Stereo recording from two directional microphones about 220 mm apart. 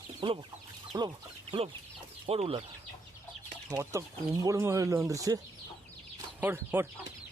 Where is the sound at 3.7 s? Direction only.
15° right (ahead or behind).